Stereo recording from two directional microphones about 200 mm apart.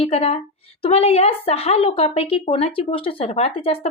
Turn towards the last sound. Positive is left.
turn(degrees=30)  # may be behind; listen again after turning